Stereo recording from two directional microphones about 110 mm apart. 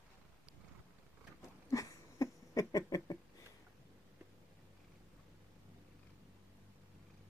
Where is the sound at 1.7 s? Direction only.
30° left (ahead or behind).